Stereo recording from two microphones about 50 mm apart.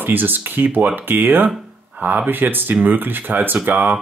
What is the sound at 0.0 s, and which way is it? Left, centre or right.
Speech, right.